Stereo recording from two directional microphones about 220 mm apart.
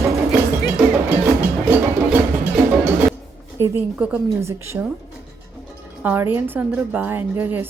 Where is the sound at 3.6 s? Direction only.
5° right (ahead or behind).